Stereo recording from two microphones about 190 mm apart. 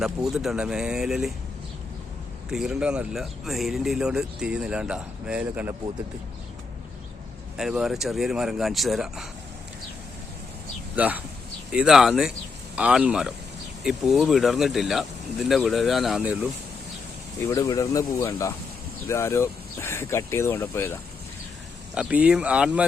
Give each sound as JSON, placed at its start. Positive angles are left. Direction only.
{"t": 0.0, "sound": "speech", "side_deg": -5}
{"t": 2.5, "sound": "speech", "side_deg": -5}
{"t": 7.5, "sound": "speech", "side_deg": -5}
{"t": 10.9, "sound": "speech", "side_deg": -10}
{"t": 17.4, "sound": "speech", "side_deg": 15}
{"t": 21.9, "sound": "speech", "side_deg": -5}